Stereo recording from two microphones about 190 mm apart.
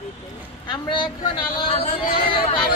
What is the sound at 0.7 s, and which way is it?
A man's voice, 25° left (ahead or behind).